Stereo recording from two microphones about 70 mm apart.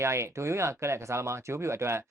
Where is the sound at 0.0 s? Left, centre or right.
Right.